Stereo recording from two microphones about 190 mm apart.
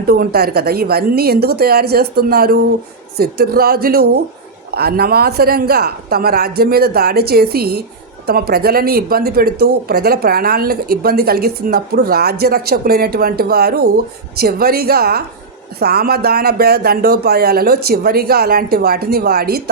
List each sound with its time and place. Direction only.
0.1 s speech: 55° right (ahead or behind)